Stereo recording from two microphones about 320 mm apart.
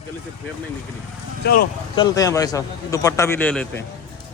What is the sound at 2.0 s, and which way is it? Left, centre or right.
A man's voice, centre.